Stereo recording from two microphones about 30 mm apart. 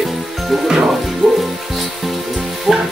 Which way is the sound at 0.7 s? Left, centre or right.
Centre.